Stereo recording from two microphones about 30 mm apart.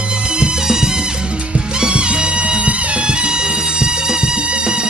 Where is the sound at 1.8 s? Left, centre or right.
Right.